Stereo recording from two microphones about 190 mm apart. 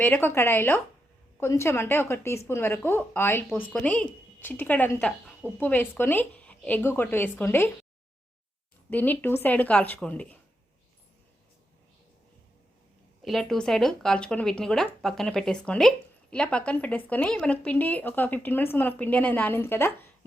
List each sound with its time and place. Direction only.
0.0 s speech: 10° left (ahead or behind)
8.9 s speech: 10° left (ahead or behind)
13.2 s speech: centre (ahead or behind)